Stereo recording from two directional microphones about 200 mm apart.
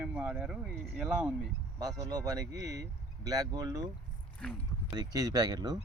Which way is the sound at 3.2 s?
20° right (ahead or behind).